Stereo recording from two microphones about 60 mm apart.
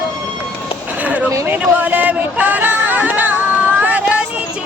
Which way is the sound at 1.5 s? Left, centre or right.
Right.